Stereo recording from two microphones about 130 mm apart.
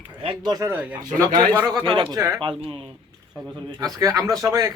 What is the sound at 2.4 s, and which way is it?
Speech, 40° right (ahead or behind).